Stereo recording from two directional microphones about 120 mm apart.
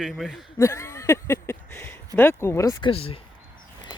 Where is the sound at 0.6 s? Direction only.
25° left (ahead or behind).